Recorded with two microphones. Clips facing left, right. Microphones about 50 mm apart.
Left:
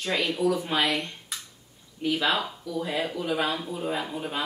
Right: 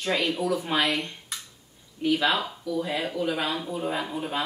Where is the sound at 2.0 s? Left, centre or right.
Centre.